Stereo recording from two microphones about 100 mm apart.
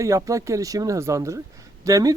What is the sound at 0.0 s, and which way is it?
A woman's voice, 30° right (ahead or behind).